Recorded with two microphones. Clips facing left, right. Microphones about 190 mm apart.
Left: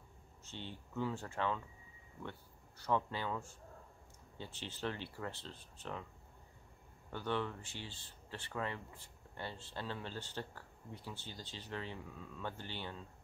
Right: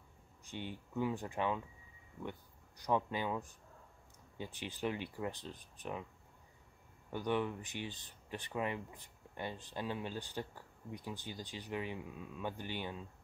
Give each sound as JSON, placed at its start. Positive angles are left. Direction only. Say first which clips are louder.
{"t": 0.5, "sound": "speech", "louder": "right 4 dB", "side_deg": -15}
{"t": 2.8, "sound": "speech", "louder": "right 2 dB", "side_deg": -15}
{"t": 7.1, "sound": "speech", "louder": "right 3 dB", "side_deg": -15}